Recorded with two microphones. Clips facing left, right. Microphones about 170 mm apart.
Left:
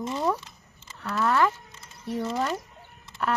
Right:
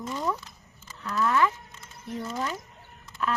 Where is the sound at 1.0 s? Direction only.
55° left (ahead or behind).